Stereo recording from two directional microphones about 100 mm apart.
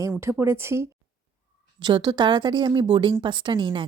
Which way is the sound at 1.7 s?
45° right (ahead or behind).